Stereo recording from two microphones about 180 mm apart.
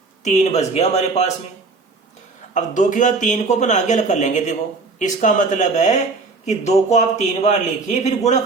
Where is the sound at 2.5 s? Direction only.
45° left (ahead or behind).